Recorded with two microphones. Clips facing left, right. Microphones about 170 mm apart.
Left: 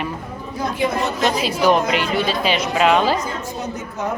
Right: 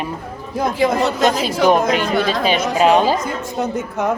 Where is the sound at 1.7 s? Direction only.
45° right (ahead or behind).